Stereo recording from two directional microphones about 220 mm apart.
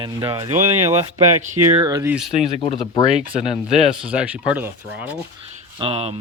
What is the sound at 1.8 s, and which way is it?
Speech, 15° right (ahead or behind).